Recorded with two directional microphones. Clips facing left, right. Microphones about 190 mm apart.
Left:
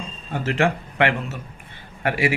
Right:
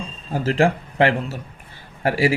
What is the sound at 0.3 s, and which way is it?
A man's voice, 30° right (ahead or behind).